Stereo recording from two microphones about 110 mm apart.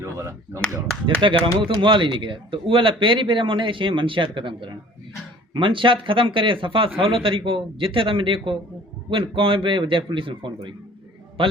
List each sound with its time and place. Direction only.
0.0 s speech: 25° right (ahead or behind)
1.2 s speech: 50° right (ahead or behind)